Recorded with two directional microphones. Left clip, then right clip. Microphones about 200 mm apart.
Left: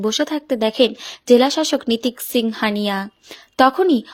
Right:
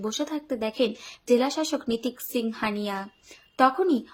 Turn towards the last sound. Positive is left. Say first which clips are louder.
# left 7 dB
turn(degrees=40)  # may be behind; listen again after turning